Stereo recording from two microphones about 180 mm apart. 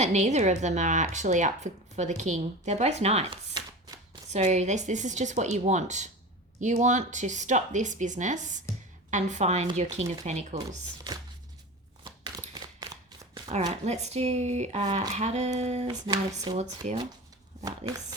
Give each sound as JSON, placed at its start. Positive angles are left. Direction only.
{"t": 0.0, "sound": "speech", "side_deg": -40}
{"t": 4.3, "sound": "speech", "side_deg": -40}
{"t": 10.7, "sound": "speech", "side_deg": -20}
{"t": 12.0, "sound": "a sound", "side_deg": -25}
{"t": 13.8, "sound": "speech", "side_deg": -40}
{"t": 15.9, "sound": "speech", "side_deg": -20}